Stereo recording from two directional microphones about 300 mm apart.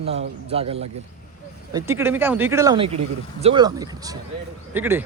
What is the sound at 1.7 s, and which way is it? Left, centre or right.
Speech, centre.